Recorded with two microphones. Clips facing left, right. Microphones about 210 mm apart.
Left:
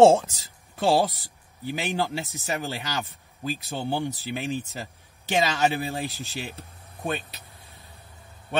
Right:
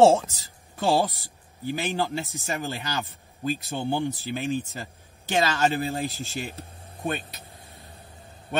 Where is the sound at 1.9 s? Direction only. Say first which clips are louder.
Even; 15° left (ahead or behind).